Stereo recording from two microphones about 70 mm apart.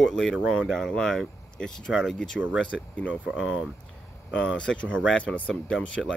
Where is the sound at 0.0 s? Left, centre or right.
Centre.